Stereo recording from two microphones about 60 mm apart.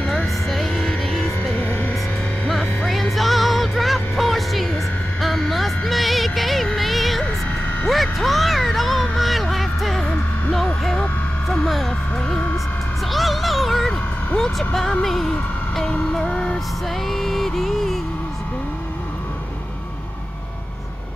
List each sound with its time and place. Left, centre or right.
0.0 s music: centre
0.5 s music: centre
1.5 s music: left
2.5 s music: centre
10.8 s vehicle: centre
15.9 s music: centre